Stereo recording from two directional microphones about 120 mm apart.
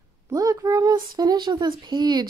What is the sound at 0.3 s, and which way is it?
A child's voice, 30° right (ahead or behind).